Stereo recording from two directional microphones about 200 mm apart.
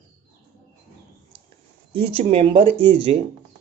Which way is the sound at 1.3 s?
25° right (ahead or behind).